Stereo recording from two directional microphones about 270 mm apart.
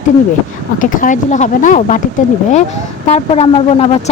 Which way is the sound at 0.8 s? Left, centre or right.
Left.